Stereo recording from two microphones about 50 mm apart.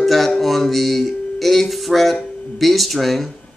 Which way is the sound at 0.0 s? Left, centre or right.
Centre.